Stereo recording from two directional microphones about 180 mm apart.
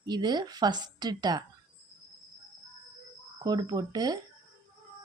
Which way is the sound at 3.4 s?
20° right (ahead or behind).